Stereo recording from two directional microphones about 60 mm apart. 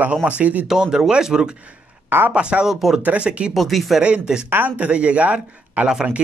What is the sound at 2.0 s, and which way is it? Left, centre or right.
Speech, right.